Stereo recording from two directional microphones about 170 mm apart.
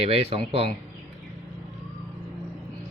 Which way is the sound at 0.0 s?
35° right (ahead or behind).